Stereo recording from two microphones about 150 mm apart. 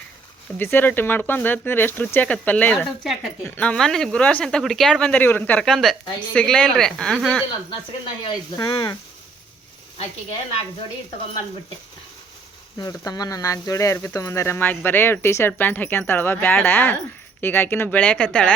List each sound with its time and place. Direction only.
0.6 s speech: 15° left (ahead or behind)
2.7 s a woman's voice: centre (ahead or behind)
8.2 s speech: 30° left (ahead or behind)
12.8 s speech: 25° left (ahead or behind); by 18.5 s 10° left (ahead or behind)